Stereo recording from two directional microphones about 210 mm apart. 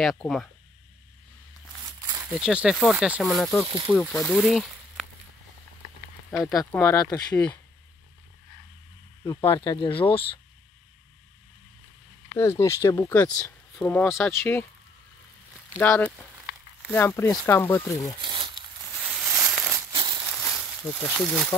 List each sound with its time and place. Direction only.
0.0 s speech: centre (ahead or behind)
1.9 s a sound: 15° right (ahead or behind)
2.3 s speech: 5° right (ahead or behind)
6.5 s speech: 15° left (ahead or behind)
9.2 s speech: 15° left (ahead or behind)
12.4 s speech: 15° left (ahead or behind)
15.8 s speech: 10° left (ahead or behind)
18.2 s crumpling: 25° right (ahead or behind)
18.9 s a sound: 5° right (ahead or behind)
19.9 s a sound: 25° right (ahead or behind)
20.4 s speech: centre (ahead or behind)